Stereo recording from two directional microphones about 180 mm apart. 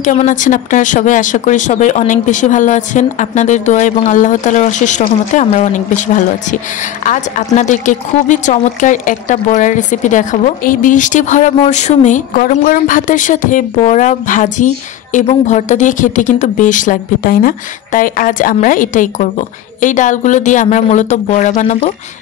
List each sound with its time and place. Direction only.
0.0 s speech: 45° left (ahead or behind)